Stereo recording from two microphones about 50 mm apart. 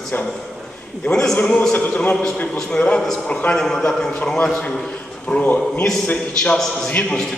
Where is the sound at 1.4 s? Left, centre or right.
Left.